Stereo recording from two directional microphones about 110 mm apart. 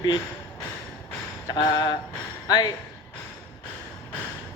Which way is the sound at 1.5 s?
40° left (ahead or behind).